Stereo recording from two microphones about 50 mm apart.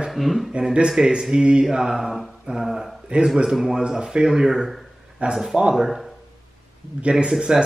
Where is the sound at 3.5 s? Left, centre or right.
Centre.